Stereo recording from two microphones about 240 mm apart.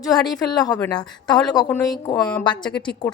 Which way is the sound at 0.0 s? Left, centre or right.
Centre.